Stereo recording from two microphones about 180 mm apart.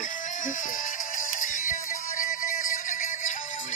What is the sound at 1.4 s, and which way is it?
Music, 45° left (ahead or behind).